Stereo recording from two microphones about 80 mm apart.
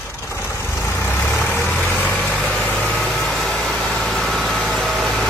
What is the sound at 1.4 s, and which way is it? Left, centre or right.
Vehicle, left.